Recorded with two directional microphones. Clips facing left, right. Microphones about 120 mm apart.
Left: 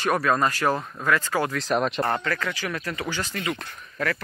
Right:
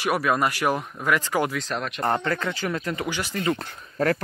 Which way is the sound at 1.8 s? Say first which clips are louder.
Left 6 dB; 25° left (ahead or behind).